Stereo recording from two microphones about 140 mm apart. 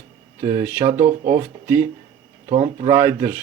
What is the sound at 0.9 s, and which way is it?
Speech, 50° right (ahead or behind).